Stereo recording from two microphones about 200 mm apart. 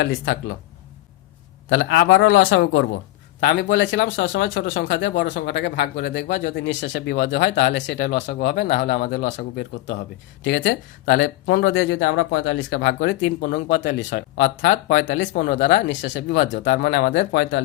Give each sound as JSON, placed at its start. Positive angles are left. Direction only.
{"t": 0.0, "sound": "speech", "side_deg": 70}
{"t": 1.7, "sound": "speech", "side_deg": 65}
{"t": 3.4, "sound": "speech", "side_deg": 60}
{"t": 7.9, "sound": "speech", "side_deg": 50}
{"t": 10.4, "sound": "speech", "side_deg": 65}
{"t": 13.4, "sound": "speech", "side_deg": 55}
{"t": 16.8, "sound": "speech", "side_deg": 60}